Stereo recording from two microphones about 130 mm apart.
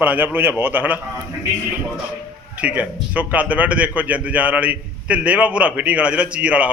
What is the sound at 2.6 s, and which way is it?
A man's voice, 10° right (ahead or behind).